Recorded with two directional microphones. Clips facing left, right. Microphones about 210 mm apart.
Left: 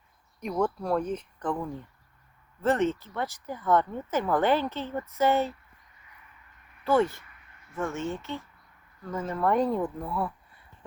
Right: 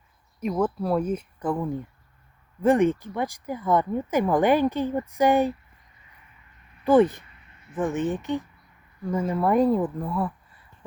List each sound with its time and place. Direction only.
0.3 s speech: 5° right (ahead or behind)
6.8 s speech: 15° right (ahead or behind); by 10.6 s centre (ahead or behind)